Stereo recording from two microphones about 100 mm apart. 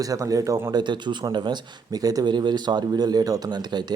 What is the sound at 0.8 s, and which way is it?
A man's voice, 50° right (ahead or behind).